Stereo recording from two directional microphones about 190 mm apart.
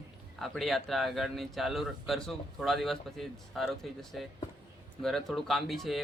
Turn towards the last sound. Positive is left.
turn(degrees=0)  # may be behind; listen again after turning